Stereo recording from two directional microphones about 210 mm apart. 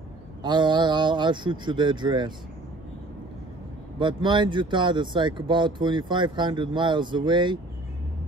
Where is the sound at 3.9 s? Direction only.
20° right (ahead or behind).